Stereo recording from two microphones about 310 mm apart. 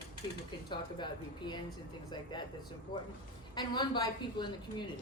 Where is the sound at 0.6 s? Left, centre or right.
Centre.